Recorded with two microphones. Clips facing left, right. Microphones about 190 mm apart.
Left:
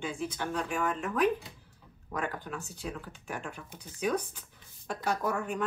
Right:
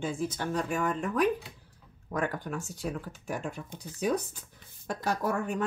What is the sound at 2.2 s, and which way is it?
Speech, 45° right (ahead or behind).